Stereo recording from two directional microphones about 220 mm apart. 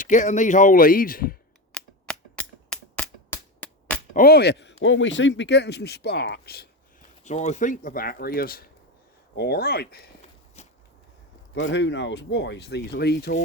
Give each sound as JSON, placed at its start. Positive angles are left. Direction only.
{"t": 0.0, "sound": "speech", "side_deg": 35}
{"t": 1.7, "sound": "a sound", "side_deg": 5}
{"t": 4.1, "sound": "speech", "side_deg": 45}
{"t": 7.3, "sound": "speech", "side_deg": 30}
{"t": 10.6, "sound": "a sound", "side_deg": 30}
{"t": 11.5, "sound": "speech", "side_deg": 55}